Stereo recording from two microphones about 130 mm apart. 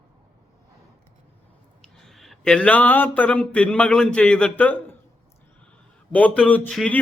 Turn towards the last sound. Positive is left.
turn(degrees=10)  # may be behind; listen again after turning